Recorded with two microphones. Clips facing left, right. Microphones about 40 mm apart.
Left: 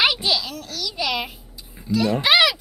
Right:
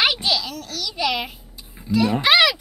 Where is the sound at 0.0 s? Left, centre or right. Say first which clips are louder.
Even; centre.